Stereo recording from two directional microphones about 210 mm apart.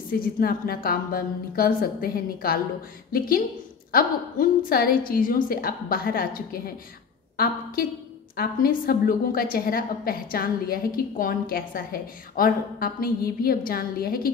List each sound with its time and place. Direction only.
0.1 s a woman's voice: 45° left (ahead or behind)
8.4 s a woman's voice: 45° left (ahead or behind)